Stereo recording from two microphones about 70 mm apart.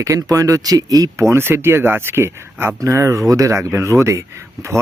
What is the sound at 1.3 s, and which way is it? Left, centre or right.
Speech, right.